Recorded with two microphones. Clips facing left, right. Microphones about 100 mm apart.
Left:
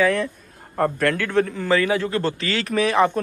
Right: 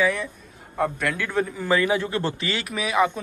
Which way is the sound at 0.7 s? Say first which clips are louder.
Left 4 dB; centre (ahead or behind).